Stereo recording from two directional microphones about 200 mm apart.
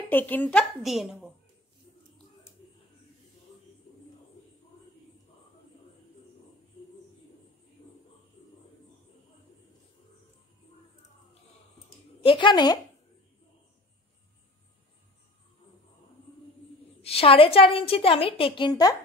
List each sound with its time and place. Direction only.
0.1 s a woman's voice: 10° left (ahead or behind)
12.2 s a woman's voice: 25° left (ahead or behind)
17.0 s a woman's voice: 30° left (ahead or behind)